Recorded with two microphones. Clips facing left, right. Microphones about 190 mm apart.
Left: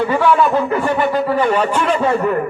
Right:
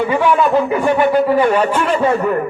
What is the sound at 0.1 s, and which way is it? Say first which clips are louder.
Speech: right 1 dB; 15° right (ahead or behind).